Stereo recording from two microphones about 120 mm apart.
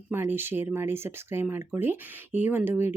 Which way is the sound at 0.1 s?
15° right (ahead or behind).